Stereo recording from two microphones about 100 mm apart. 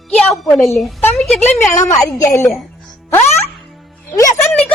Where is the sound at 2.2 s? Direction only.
30° left (ahead or behind).